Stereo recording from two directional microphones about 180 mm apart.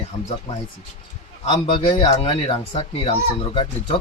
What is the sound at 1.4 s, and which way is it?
Speech, 25° left (ahead or behind).